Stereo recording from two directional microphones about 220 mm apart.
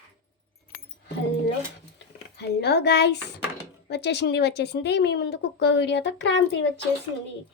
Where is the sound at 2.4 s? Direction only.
50° left (ahead or behind).